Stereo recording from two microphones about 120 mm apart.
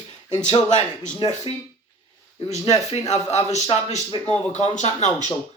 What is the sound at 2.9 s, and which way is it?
Speech, 60° left (ahead or behind).